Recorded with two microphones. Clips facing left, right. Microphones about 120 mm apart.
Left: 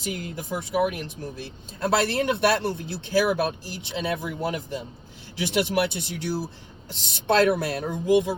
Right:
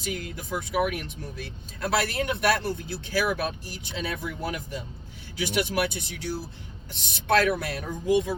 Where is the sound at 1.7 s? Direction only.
25° left (ahead or behind).